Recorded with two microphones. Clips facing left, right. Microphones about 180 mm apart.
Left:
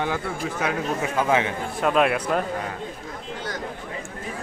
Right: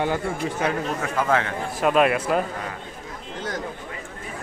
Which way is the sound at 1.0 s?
15° left (ahead or behind).